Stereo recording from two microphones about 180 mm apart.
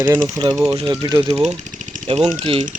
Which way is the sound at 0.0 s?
15° right (ahead or behind).